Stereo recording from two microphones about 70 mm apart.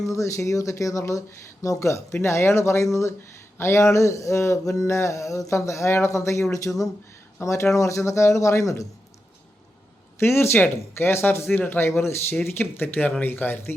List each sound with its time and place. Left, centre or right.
0.1 s a sound: left
10.2 s speech: left
11.9 s speech: left